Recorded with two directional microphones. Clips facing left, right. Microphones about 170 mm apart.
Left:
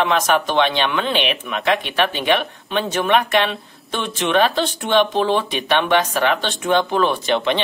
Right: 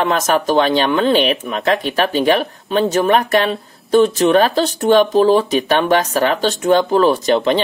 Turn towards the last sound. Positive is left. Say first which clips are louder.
# right 5 dB
turn(degrees=-40)  # may be behind; listen again after turning